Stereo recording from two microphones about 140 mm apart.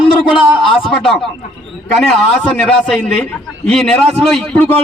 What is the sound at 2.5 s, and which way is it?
A man's voice, 10° left (ahead or behind).